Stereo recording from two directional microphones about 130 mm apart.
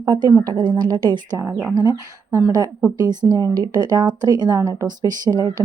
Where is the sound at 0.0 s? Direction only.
30° right (ahead or behind).